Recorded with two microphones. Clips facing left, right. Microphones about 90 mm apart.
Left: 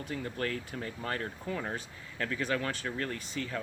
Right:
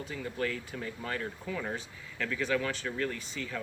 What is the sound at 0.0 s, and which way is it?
Speech, 50° left (ahead or behind).